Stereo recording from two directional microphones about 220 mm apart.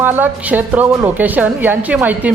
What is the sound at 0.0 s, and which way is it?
A woman's voice, 10° right (ahead or behind).